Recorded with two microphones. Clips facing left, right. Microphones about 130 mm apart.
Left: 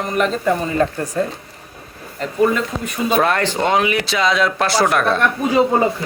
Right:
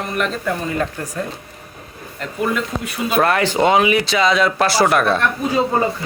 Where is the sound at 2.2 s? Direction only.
Centre (ahead or behind).